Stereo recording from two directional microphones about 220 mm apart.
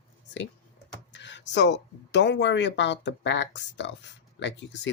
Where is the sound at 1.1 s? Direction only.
55° left (ahead or behind).